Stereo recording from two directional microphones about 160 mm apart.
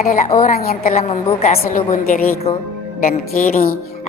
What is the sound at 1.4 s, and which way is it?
Speech, 45° left (ahead or behind).